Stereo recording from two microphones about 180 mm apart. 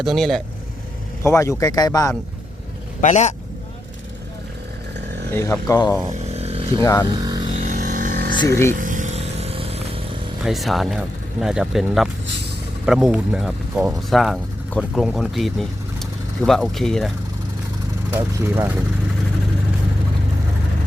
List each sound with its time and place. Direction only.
0.0 s speech: centre (ahead or behind)
1.2 s speech: 15° left (ahead or behind)
3.0 s a man's voice: 40° left (ahead or behind)
5.3 s speech: 15° left (ahead or behind)
6.1 s chainsaw: 35° right (ahead or behind)
6.8 s speech: 15° left (ahead or behind)
7.1 s speech: 20° right (ahead or behind)
7.5 s vehicle: 40° right (ahead or behind)
8.4 s speech: 15° left (ahead or behind)
8.7 s vehicle: 45° right (ahead or behind)
10.4 s speech: centre (ahead or behind)
18.1 s speech: 15° right (ahead or behind)